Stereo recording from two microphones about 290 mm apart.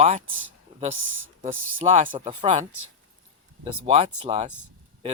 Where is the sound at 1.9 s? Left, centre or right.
Right.